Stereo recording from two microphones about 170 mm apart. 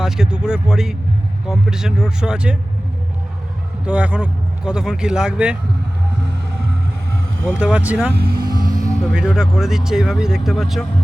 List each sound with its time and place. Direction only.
0.0 s speech: 5° right (ahead or behind)
3.8 s speech: 5° right (ahead or behind)
7.4 s speech: 10° right (ahead or behind)
8.1 s speech: 65° right (ahead or behind)
9.1 s speech: 5° right (ahead or behind)